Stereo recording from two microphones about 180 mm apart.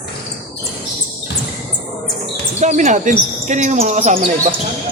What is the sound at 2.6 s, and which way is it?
Speech, 40° right (ahead or behind).